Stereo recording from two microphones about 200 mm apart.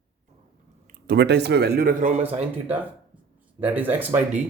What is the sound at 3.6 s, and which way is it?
Speech, 10° right (ahead or behind).